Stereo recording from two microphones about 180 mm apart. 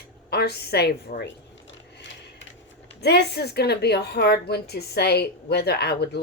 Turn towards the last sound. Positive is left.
turn(degrees=65)  # may be behind; listen again after turning